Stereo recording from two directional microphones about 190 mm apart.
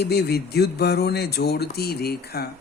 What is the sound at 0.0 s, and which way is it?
Speech, 55° left (ahead or behind).